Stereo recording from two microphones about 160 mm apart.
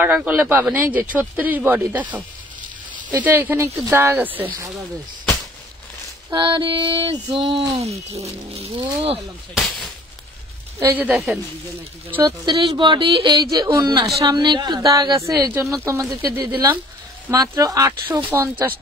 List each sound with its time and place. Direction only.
0.0 s speech: 10° right (ahead or behind)
6.3 s speech: 30° right (ahead or behind)
10.8 s speech: 10° right (ahead or behind)
12.3 s a woman's voice: 30° right (ahead or behind)